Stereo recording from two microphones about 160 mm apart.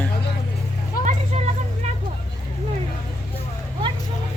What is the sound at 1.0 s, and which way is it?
Vehicle, 65° left (ahead or behind).